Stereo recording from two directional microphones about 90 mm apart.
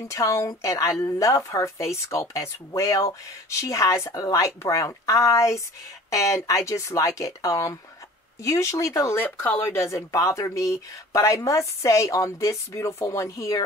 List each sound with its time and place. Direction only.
0.1 s a woman's voice: 35° left (ahead or behind)